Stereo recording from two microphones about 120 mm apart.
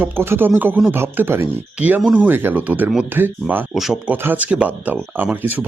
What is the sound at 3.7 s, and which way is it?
Speech, centre (ahead or behind).